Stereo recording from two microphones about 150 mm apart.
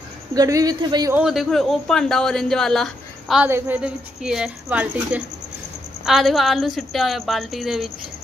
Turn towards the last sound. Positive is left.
turn(degrees=0)  # may be behind; listen again after turning